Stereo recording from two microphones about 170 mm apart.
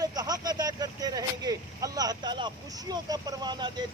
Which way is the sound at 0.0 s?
25° right (ahead or behind).